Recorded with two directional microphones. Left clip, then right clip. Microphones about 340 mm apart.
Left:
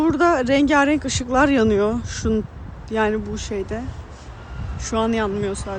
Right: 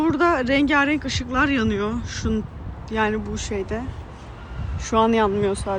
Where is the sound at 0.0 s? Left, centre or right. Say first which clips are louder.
Left 2 dB; centre.